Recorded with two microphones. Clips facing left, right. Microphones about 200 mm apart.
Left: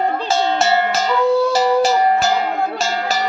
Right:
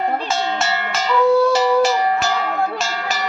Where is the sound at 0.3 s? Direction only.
35° left (ahead or behind).